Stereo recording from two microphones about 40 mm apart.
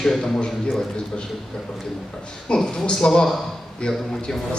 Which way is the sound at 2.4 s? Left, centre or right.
Left.